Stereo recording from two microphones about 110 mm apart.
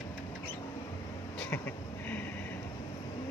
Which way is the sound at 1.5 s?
20° left (ahead or behind).